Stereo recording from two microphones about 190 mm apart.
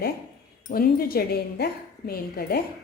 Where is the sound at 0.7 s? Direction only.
50° left (ahead or behind).